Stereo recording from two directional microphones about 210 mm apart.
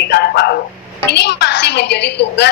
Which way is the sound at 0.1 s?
50° left (ahead or behind).